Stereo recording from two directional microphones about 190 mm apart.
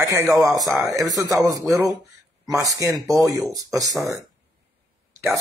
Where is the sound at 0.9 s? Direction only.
20° right (ahead or behind).